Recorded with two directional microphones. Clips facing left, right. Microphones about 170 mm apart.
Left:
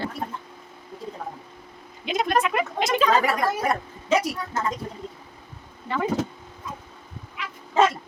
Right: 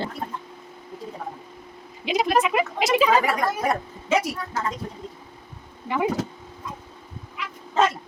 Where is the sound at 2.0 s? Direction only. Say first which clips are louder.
Right 2 dB; centre (ahead or behind).